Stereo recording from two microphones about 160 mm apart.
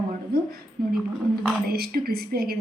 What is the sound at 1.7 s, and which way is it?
Speech, 70° right (ahead or behind).